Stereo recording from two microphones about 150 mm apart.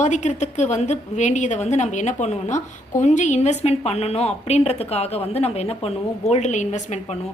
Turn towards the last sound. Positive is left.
turn(degrees=55)  # may be behind; listen again after turning